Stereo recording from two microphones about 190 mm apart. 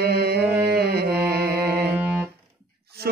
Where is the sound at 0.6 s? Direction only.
55° right (ahead or behind).